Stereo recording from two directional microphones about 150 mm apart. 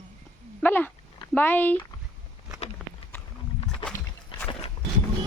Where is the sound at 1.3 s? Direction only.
10° left (ahead or behind).